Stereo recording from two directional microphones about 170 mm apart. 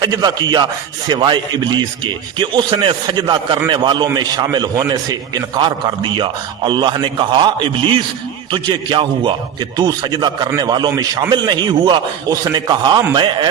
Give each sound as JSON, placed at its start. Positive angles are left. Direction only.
{"t": 0.0, "sound": "a man's voice", "side_deg": -25}